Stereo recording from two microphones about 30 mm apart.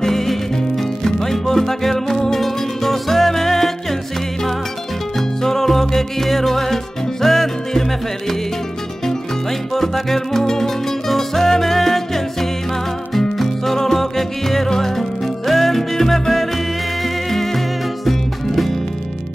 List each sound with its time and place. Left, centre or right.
0.0 s music: centre
5.1 s music: centre
9.0 s music: centre
13.7 s music: centre